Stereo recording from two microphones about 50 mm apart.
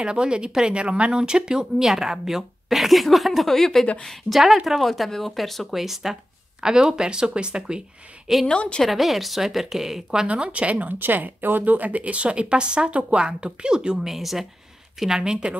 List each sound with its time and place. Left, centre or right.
0.0 s speech: centre
6.6 s speech: centre
8.5 s a woman's voice: centre
8.8 s speech: centre
10.2 s a woman's voice: right